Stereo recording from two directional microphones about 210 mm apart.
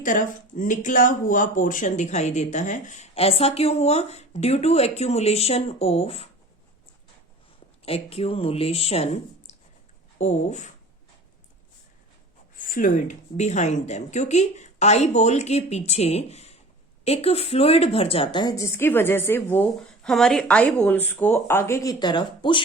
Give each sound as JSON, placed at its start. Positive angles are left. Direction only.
{"t": 0.0, "sound": "speech", "side_deg": 40}
{"t": 7.9, "sound": "speech", "side_deg": 25}
{"t": 9.5, "sound": "a sound", "side_deg": 35}
{"t": 10.2, "sound": "speech", "side_deg": 35}
{"t": 12.5, "sound": "speech", "side_deg": 40}